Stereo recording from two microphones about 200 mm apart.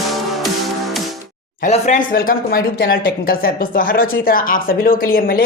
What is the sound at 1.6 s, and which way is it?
Speech, 35° left (ahead or behind).